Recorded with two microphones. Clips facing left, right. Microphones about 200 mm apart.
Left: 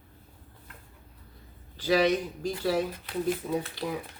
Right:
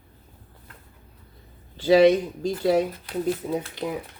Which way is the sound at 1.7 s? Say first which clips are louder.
Right 8 dB; 25° right (ahead or behind).